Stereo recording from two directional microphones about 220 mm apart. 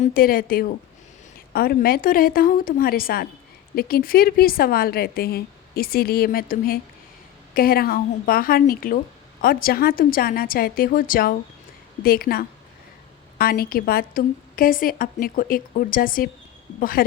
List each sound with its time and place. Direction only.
0.0 s a woman's voice: 40° left (ahead or behind)